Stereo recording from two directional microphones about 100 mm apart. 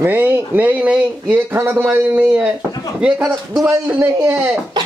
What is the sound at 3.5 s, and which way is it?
Speech, 35° right (ahead or behind).